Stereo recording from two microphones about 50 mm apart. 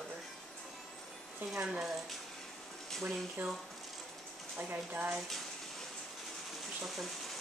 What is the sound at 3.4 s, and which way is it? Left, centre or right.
Speech, right.